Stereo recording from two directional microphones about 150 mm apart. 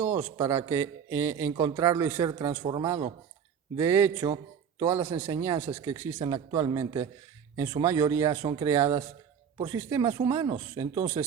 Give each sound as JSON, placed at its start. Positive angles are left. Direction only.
{"t": 0.0, "sound": "a man's voice", "side_deg": -15}
{"t": 2.6, "sound": "speech", "side_deg": -30}
{"t": 3.8, "sound": "a man's voice", "side_deg": -15}
{"t": 10.9, "sound": "a man's voice", "side_deg": -15}